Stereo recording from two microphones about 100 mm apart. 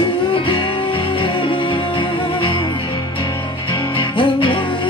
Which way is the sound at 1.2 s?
60° left (ahead or behind).